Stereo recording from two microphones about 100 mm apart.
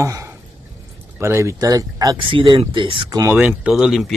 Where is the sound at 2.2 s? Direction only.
60° right (ahead or behind).